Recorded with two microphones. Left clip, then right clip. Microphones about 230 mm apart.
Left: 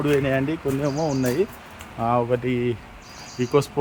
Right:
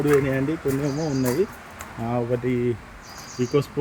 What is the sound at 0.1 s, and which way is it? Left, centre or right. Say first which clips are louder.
Speech: even; centre.